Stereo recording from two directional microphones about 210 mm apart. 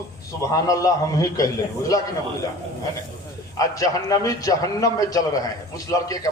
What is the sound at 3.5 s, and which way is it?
A man's voice, 15° left (ahead or behind).